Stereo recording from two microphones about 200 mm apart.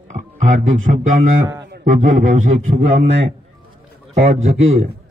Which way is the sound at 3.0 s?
65° right (ahead or behind).